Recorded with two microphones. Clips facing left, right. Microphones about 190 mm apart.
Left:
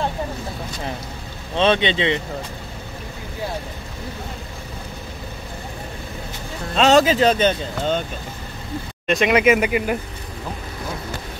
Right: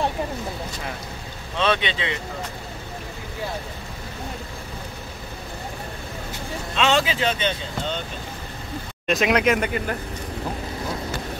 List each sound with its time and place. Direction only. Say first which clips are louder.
1.6 s speech: left 5 dB; 25° left (ahead or behind)
6.7 s speech: left 7 dB; 40° left (ahead or behind)
9.0 s speech: left 3 dB; centre (ahead or behind)